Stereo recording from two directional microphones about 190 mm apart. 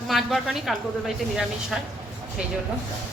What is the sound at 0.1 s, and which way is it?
Speech, centre (ahead or behind).